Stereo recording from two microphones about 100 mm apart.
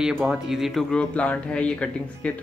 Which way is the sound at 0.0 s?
Centre (ahead or behind).